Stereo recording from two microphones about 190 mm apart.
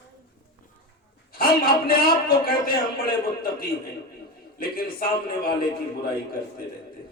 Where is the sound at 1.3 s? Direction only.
50° left (ahead or behind).